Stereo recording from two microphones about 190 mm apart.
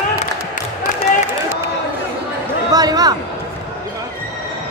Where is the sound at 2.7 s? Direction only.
20° right (ahead or behind).